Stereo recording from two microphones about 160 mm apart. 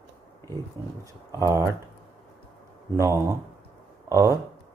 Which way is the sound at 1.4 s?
20° right (ahead or behind).